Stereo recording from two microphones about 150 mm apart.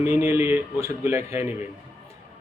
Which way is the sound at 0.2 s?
15° right (ahead or behind).